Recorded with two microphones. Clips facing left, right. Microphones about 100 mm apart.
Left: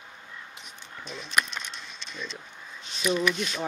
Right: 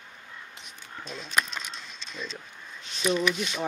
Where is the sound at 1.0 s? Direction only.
35° right (ahead or behind).